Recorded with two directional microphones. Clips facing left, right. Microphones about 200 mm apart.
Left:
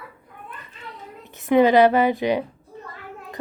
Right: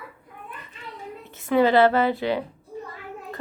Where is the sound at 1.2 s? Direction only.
15° left (ahead or behind).